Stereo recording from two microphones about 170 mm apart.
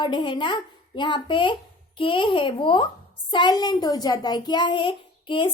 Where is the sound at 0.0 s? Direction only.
30° left (ahead or behind).